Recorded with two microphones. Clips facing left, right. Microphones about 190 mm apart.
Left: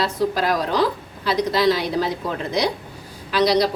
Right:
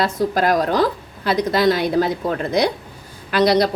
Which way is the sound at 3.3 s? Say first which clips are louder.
Right 2 dB; 55° right (ahead or behind).